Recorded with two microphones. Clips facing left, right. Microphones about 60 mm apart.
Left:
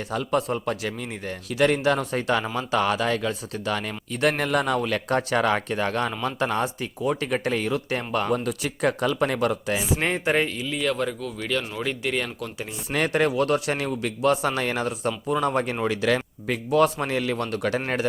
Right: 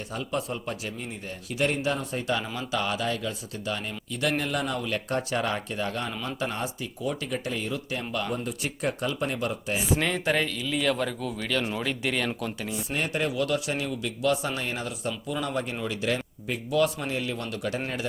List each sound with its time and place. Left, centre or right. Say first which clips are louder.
0.1 s a man's voice: left 7 dB; left
4.1 s a man's voice: left 5 dB; left
7.0 s speech: left 6 dB; left
7.3 s a man's voice: left 6 dB; left
8.3 s speech: left 6 dB; left
10.0 s speech: left 3 dB; left
10.7 s a man's voice: left 1 dB; centre
12.9 s speech: left 7 dB; left
13.3 s a man's voice: left 4 dB; left
14.4 s a man's voice: left 6 dB; left
15.3 s speech: left 7 dB; left
15.6 s a man's voice: left 6 dB; left
16.0 s speech: left 5 dB; left
16.7 s a man's voice: left 5 dB; left